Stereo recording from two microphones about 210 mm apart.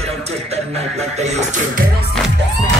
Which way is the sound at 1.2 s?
35° right (ahead or behind).